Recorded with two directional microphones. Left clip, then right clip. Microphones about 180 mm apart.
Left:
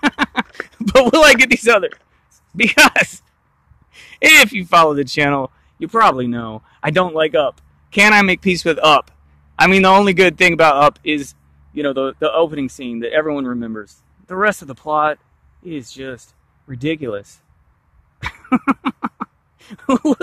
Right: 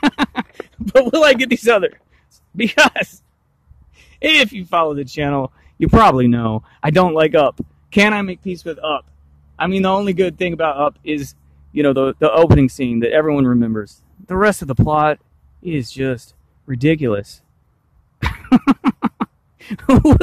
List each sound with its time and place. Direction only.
0.0 s a sound: 10° right (ahead or behind)
0.6 s a man's voice: 5° left (ahead or behind)
5.4 s speech: 15° right (ahead or behind)
8.2 s speech: 15° left (ahead or behind)
9.6 s a man's voice: 5° left (ahead or behind)
11.2 s speech: 20° right (ahead or behind)
18.2 s a sound: 20° right (ahead or behind)